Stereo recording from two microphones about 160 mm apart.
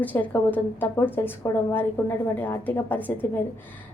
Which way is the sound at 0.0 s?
10° left (ahead or behind).